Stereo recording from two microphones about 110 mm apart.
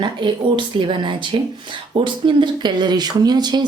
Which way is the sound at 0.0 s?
45° right (ahead or behind).